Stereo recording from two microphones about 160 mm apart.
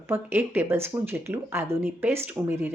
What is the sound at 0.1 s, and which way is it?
A woman's voice, 15° right (ahead or behind).